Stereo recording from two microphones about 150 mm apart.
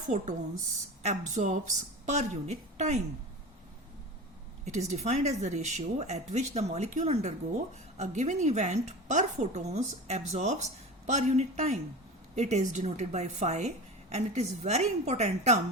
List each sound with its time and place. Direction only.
1.0 s a woman's voice: 55° right (ahead or behind)
4.6 s a woman's voice: 50° right (ahead or behind)